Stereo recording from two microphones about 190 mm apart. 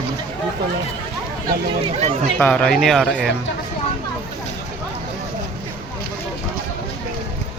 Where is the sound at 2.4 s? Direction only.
5° left (ahead or behind).